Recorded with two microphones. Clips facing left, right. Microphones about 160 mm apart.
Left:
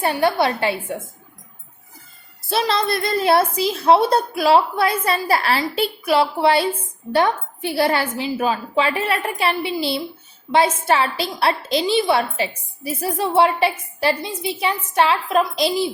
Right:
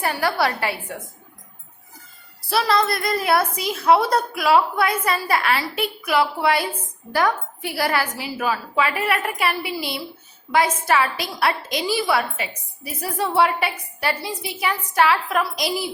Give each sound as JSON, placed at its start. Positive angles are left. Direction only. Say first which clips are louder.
{"t": 0.0, "sound": "a woman's voice", "louder": "left 3 dB", "side_deg": 20}
{"t": 2.5, "sound": "a woman's voice", "louder": "even", "side_deg": 25}